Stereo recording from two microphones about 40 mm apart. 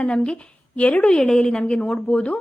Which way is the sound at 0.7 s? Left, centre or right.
Left.